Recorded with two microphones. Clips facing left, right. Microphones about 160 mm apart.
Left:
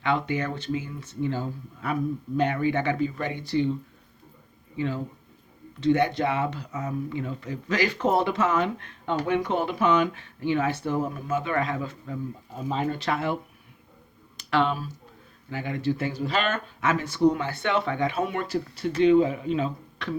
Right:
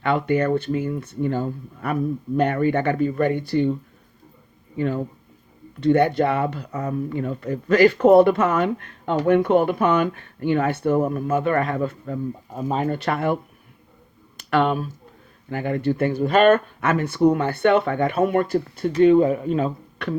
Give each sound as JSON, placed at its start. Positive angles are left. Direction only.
{"t": 0.0, "sound": "speech", "side_deg": -55}
{"t": 5.8, "sound": "speech", "side_deg": -55}